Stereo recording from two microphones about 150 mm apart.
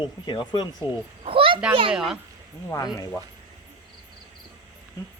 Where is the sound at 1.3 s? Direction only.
35° right (ahead or behind).